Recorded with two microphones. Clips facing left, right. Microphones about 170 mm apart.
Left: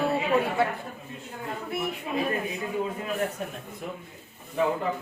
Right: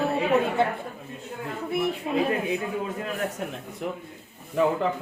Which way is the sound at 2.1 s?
35° right (ahead or behind).